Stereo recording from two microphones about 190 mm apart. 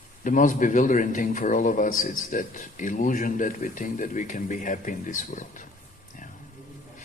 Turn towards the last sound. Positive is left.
turn(degrees=40)  # may be behind; listen again after turning